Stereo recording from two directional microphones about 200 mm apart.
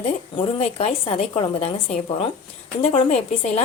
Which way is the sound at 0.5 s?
30° left (ahead or behind).